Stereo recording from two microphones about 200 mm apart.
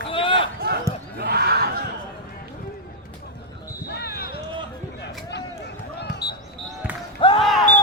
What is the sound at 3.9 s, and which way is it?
Basketball bounce, 55° left (ahead or behind).